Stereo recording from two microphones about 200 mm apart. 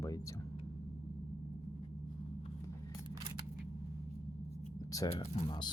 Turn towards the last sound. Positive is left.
turn(degrees=20)  # may be behind; listen again after turning